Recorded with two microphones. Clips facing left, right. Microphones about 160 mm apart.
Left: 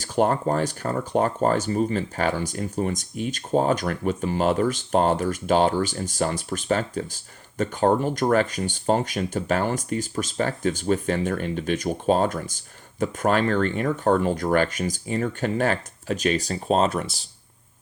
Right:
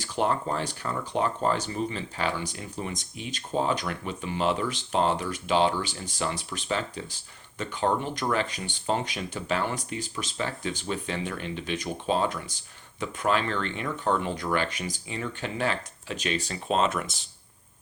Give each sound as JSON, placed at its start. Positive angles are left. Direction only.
{"t": 0.0, "sound": "speech", "side_deg": 45}